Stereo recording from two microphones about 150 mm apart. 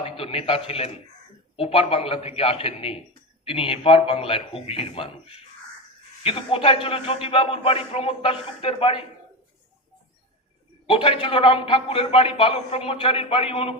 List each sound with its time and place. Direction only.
0.0 s a man's voice: 40° left (ahead or behind)
10.8 s a man's voice: 35° left (ahead or behind)